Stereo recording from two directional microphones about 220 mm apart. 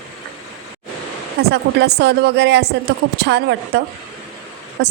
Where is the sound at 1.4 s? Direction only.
45° right (ahead or behind).